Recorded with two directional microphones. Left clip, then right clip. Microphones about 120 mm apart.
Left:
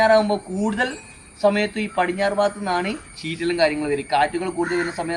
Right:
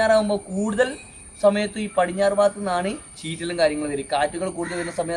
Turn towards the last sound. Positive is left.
turn(degrees=-45)  # may be behind; listen again after turning